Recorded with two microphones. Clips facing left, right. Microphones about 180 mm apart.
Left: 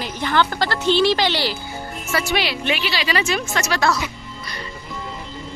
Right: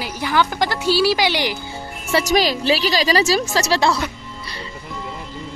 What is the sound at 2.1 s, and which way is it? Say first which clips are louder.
A woman's voice: right 5 dB; 35° right (ahead or behind).